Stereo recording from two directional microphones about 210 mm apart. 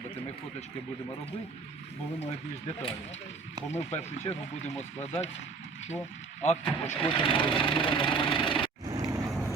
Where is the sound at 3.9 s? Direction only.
35° left (ahead or behind).